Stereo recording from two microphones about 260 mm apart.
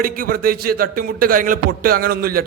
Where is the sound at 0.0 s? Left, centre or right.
Right.